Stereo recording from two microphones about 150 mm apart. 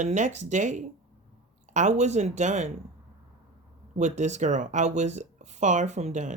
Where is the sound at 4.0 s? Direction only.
50° right (ahead or behind).